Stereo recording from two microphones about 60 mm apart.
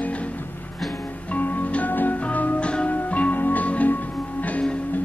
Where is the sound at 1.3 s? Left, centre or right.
Left.